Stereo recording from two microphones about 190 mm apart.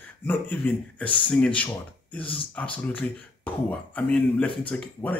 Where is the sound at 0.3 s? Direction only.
10° left (ahead or behind).